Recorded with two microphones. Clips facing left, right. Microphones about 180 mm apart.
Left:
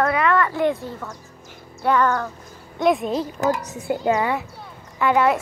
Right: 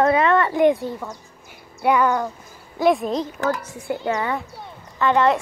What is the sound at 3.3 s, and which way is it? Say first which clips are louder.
A child's voice: left 2 dB; 20° left (ahead or behind).